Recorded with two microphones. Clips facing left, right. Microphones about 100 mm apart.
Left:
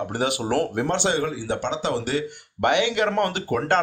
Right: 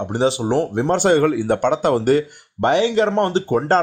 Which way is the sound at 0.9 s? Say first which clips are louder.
Right 13 dB; 50° right (ahead or behind).